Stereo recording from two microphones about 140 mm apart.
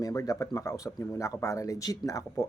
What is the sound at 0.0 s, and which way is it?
Speech, 25° left (ahead or behind).